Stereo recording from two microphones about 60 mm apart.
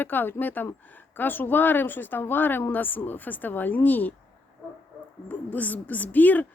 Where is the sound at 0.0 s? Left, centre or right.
Left.